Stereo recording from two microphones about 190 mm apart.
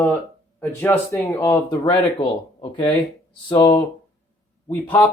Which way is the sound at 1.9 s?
25° left (ahead or behind).